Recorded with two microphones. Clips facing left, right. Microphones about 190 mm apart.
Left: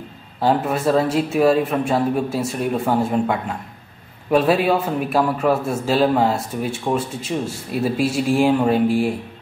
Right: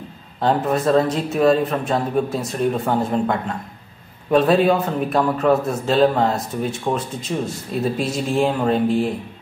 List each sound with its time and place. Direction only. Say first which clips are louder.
0.4 s a man's voice: even; 5° left (ahead or behind)